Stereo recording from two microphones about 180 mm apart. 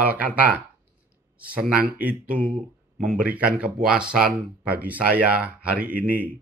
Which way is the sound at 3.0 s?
Centre (ahead or behind).